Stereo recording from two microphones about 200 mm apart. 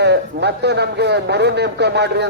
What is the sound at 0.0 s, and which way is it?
A man's voice, 55° right (ahead or behind).